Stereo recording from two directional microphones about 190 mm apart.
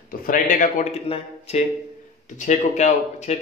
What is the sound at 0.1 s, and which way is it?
Speech, 45° left (ahead or behind).